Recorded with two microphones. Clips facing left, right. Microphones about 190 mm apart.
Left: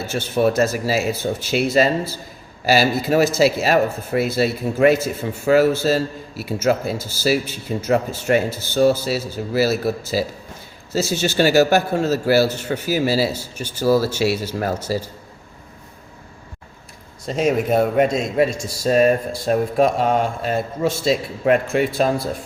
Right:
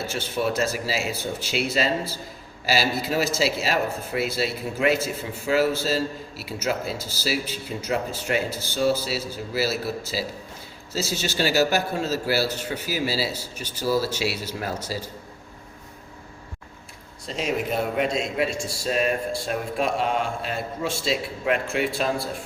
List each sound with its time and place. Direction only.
0.1 s a man's voice: 50° left (ahead or behind)
17.2 s a man's voice: 50° left (ahead or behind)